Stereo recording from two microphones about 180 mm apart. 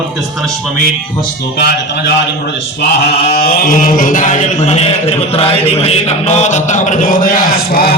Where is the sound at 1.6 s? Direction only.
65° left (ahead or behind).